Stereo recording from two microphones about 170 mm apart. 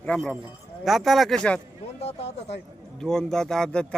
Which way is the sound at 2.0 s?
35° left (ahead or behind).